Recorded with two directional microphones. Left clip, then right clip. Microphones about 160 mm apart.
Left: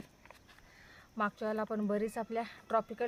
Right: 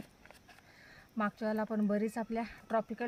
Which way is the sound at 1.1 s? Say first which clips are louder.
Left 1 dB; 30° left (ahead or behind).